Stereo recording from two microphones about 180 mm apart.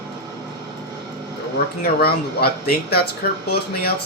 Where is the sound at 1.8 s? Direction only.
60° left (ahead or behind).